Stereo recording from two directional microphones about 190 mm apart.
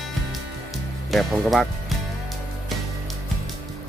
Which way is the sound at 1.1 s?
Centre (ahead or behind).